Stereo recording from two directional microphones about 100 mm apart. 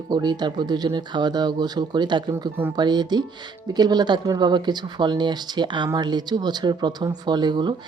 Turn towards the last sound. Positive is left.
turn(degrees=-45)  # may be behind; listen again after turning